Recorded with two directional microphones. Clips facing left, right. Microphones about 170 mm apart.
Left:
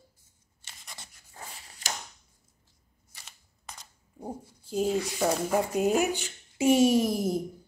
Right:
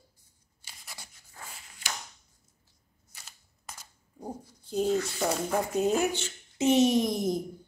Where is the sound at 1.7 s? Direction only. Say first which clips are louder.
Left 2 dB; 45° left (ahead or behind).